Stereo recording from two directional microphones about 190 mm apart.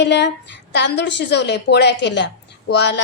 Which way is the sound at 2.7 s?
65° left (ahead or behind).